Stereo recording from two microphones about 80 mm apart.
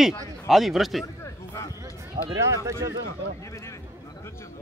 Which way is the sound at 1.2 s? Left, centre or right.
Left.